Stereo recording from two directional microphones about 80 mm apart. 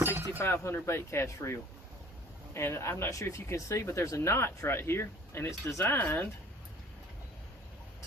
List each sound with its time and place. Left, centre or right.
0.3 s speech: left
5.8 s speech: left